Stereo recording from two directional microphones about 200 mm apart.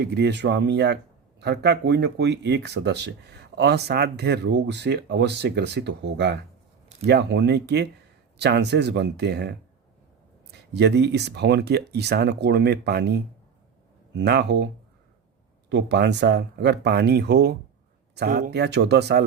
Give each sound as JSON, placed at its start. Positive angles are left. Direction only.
{"t": 0.0, "sound": "speech", "side_deg": -55}
{"t": 15.7, "sound": "speech", "side_deg": -60}